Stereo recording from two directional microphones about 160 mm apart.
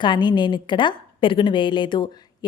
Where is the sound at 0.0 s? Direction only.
30° left (ahead or behind).